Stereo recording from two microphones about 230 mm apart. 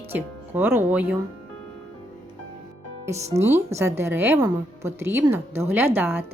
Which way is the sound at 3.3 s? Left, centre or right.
Centre.